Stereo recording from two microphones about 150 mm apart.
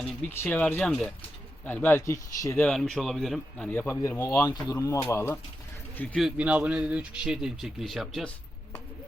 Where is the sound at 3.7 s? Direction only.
15° left (ahead or behind).